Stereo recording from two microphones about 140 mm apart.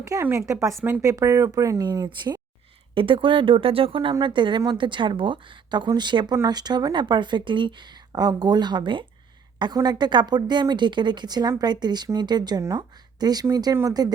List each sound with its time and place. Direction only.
0.0 s a woman's voice: 20° right (ahead or behind)